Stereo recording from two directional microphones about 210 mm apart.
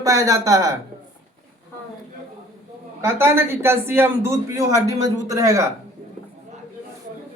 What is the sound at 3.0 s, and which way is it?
A man's voice, 10° right (ahead or behind).